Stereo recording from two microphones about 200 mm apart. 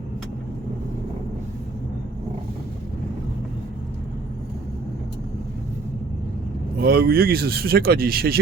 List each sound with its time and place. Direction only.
6.7 s speech: 50° right (ahead or behind)